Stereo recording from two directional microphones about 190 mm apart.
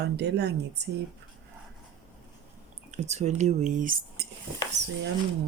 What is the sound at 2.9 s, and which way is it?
Speech, 35° right (ahead or behind).